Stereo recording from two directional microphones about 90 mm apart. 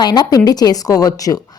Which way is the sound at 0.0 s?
50° left (ahead or behind).